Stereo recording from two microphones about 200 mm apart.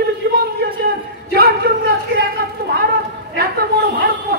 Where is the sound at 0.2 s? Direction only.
60° right (ahead or behind).